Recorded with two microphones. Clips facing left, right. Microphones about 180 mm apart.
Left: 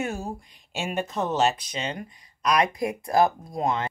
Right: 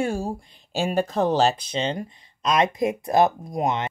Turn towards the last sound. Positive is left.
turn(degrees=-20)  # may be behind; listen again after turning